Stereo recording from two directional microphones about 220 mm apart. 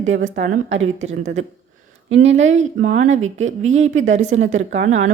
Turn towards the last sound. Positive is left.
turn(degrees=-30)  # may be behind; listen again after turning